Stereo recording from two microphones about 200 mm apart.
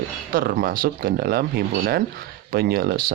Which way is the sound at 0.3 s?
45° right (ahead or behind).